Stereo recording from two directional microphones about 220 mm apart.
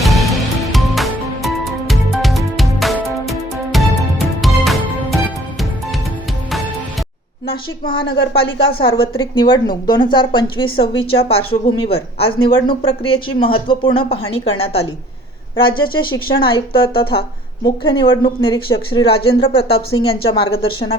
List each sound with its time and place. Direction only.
0.0 s music: centre (ahead or behind)
8.4 s a woman's voice: 25° left (ahead or behind)